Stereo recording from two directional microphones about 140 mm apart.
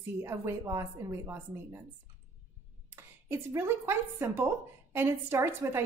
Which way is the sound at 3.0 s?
15° right (ahead or behind).